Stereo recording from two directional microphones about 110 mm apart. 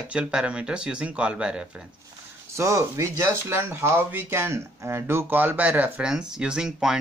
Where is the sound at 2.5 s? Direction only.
25° right (ahead or behind).